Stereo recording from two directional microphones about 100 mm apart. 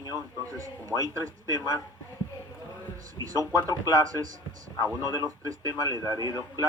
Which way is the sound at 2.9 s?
35° right (ahead or behind).